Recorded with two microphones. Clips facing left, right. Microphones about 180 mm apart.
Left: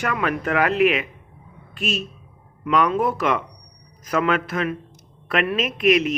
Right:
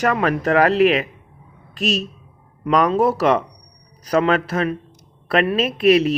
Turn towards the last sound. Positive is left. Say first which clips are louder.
# right 4 dB
turn(degrees=-35)  # may be behind; listen again after turning